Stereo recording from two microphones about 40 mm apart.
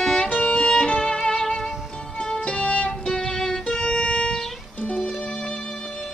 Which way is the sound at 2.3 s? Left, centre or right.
Left.